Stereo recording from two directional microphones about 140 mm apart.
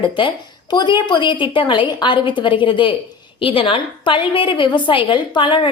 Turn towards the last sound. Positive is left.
turn(degrees=35)  # may be behind; listen again after turning